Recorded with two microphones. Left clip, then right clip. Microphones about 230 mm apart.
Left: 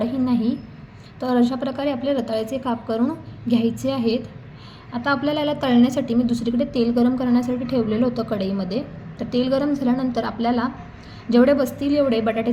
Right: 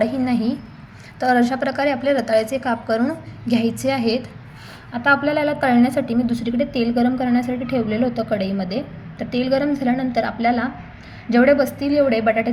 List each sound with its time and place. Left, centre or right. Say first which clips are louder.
0.0 s a sound: right 2 dB; right
1.2 s a woman's voice: right 4 dB; right
5.2 s a woman's voice: right 3 dB; centre
6.0 s a woman's voice: right 1 dB; right